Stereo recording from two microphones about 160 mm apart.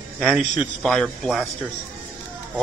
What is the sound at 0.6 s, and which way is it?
Speech, centre (ahead or behind).